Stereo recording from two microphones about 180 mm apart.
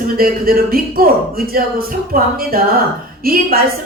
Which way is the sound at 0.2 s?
55° right (ahead or behind).